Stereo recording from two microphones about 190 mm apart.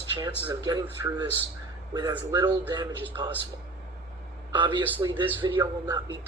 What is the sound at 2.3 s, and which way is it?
Speech, 25° right (ahead or behind).